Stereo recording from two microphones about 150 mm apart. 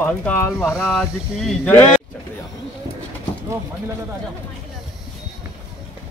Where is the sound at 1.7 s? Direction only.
10° left (ahead or behind).